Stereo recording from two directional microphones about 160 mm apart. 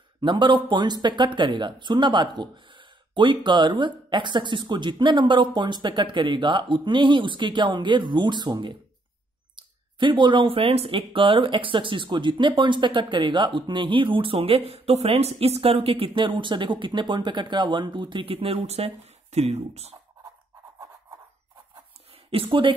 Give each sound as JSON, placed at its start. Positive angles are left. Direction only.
{"t": 0.2, "sound": "speech", "side_deg": -30}
{"t": 22.1, "sound": "speech", "side_deg": -35}